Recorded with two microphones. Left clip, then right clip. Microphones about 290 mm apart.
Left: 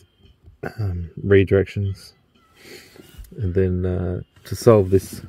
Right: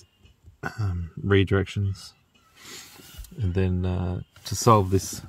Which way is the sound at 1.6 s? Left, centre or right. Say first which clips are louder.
Left 3 dB; right.